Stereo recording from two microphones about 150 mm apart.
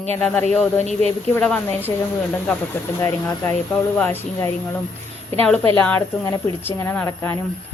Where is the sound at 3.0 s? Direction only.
20° left (ahead or behind).